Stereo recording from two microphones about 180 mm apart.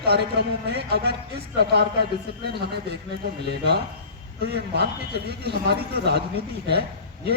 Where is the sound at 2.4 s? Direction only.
65° right (ahead or behind).